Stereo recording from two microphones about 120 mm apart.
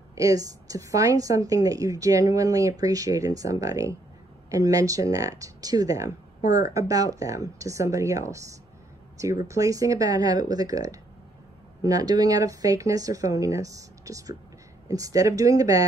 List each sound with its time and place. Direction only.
0.1 s speech: 30° right (ahead or behind)